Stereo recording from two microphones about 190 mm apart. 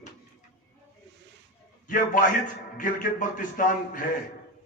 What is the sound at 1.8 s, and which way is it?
A man's voice, 45° left (ahead or behind).